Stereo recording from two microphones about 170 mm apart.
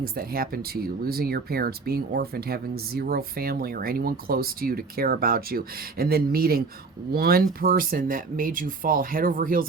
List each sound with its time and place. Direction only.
0.0 s speech: 60° right (ahead or behind)